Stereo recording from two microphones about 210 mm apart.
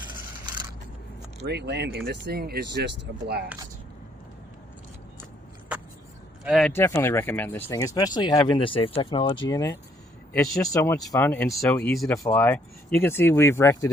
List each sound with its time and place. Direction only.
1.5 s speech: 50° right (ahead or behind)
6.4 s speech: centre (ahead or behind)